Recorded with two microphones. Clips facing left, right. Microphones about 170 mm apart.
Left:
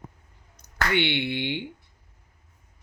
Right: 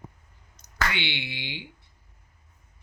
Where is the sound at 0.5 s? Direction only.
55° left (ahead or behind).